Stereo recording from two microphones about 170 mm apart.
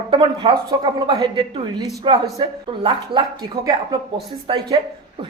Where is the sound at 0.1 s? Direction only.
30° right (ahead or behind).